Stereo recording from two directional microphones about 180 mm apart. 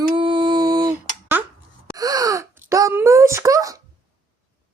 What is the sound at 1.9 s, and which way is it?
Wail, 20° right (ahead or behind).